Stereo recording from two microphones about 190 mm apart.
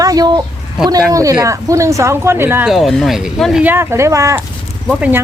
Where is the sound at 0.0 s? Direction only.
20° right (ahead or behind).